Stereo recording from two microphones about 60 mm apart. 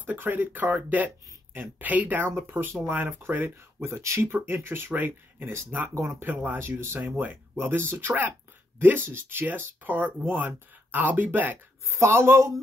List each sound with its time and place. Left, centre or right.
0.0 s speech: right
4.2 s speech: right
5.9 s speech: right
6.2 s speech: right
8.1 s speech: right
11.9 s speech: right